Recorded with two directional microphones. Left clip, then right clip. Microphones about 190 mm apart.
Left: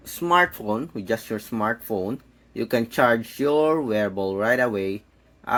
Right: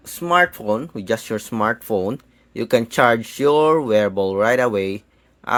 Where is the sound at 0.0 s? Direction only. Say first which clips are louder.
Right 3 dB; 25° right (ahead or behind).